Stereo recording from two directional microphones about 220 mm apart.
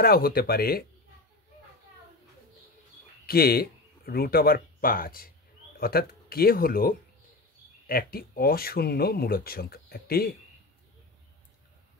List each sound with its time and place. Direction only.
0.0 s speech: 45° left (ahead or behind)
3.3 s speech: 45° left (ahead or behind)